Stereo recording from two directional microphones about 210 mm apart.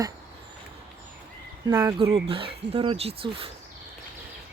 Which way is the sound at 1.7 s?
20° right (ahead or behind).